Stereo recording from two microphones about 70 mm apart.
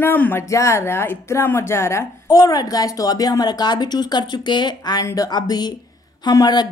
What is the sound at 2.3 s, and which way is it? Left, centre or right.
A woman's voice, left.